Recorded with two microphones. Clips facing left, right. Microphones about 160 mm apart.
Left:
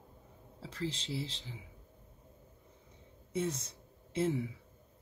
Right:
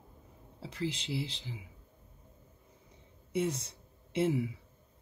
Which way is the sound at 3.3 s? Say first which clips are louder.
Right 3 dB; 30° right (ahead or behind).